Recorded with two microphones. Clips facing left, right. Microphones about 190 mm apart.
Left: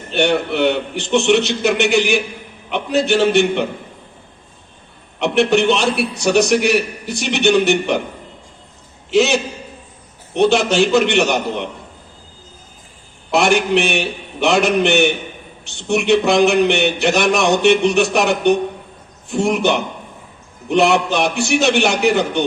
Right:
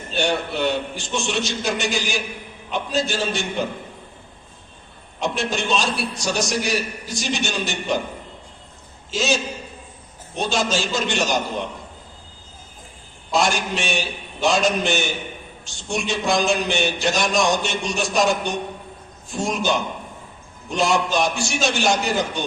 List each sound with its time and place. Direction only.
0.1 s a man's voice: 65° left (ahead or behind)
5.2 s a man's voice: 65° left (ahead or behind)
9.0 s a man's voice: 65° left (ahead or behind)
13.3 s a man's voice: 65° left (ahead or behind)